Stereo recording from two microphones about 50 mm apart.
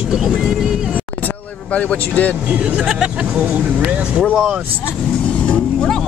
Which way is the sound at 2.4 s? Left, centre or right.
Right.